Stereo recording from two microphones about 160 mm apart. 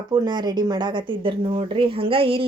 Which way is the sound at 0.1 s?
25° right (ahead or behind).